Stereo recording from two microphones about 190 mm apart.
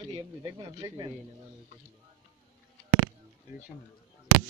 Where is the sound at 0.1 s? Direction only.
20° right (ahead or behind).